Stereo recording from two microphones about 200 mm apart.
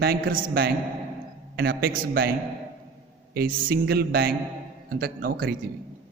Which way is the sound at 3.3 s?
50° right (ahead or behind).